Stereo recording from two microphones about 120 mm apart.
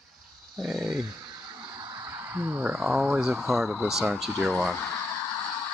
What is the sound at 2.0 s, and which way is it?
Speech, 20° right (ahead or behind).